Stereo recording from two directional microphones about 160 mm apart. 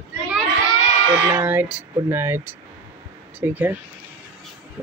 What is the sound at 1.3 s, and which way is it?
Speech, 10° right (ahead or behind).